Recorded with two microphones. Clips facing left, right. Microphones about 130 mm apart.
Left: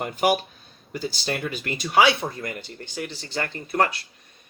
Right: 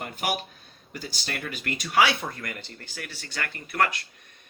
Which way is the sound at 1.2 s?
25° left (ahead or behind).